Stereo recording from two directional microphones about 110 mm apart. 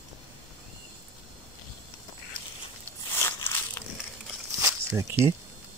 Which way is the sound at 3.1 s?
25° left (ahead or behind).